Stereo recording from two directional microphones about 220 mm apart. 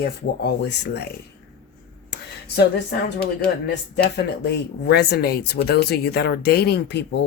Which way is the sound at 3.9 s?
50° left (ahead or behind).